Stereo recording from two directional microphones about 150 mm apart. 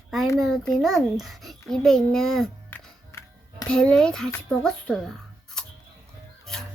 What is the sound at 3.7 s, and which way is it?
A child's voice, 5° left (ahead or behind).